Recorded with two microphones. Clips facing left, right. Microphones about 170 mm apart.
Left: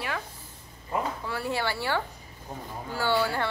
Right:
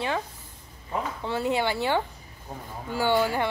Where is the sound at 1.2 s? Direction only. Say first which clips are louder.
Right 4 dB; 20° right (ahead or behind).